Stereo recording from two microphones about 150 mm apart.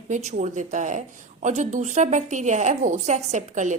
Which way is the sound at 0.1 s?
50° right (ahead or behind).